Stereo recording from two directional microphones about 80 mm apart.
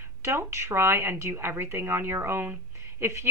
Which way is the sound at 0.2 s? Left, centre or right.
Right.